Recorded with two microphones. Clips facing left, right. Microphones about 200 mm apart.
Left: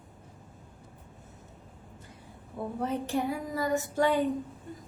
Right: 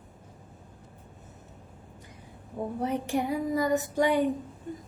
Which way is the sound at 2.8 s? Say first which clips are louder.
Right 1 dB; 15° right (ahead or behind).